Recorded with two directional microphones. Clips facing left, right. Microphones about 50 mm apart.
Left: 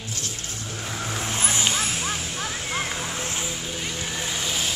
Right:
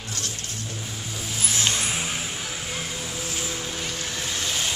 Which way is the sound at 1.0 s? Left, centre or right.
Left.